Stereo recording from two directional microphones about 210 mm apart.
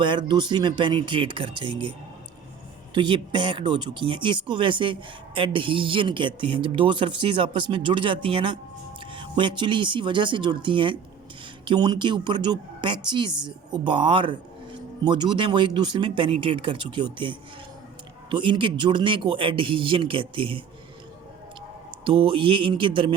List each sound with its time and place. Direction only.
0.0 s speech: 20° right (ahead or behind)
2.9 s speech: 20° right (ahead or behind)
22.0 s speech: 25° right (ahead or behind)